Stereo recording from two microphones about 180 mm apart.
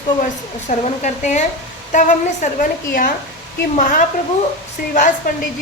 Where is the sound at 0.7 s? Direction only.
45° left (ahead or behind).